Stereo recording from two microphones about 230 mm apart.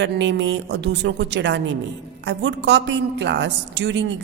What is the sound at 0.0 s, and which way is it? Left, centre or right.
A woman's voice, right.